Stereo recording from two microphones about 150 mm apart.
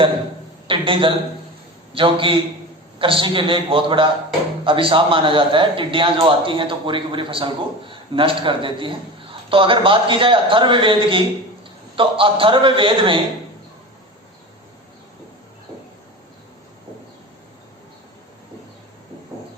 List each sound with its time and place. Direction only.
0.7 s a man's voice: 35° right (ahead or behind)